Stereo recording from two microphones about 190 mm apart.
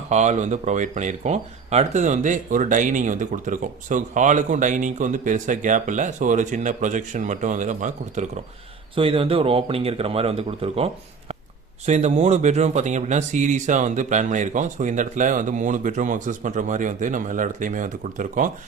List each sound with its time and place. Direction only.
0.1 s speech: 35° right (ahead or behind)
9.0 s speech: 30° right (ahead or behind)
11.9 s speech: 35° right (ahead or behind)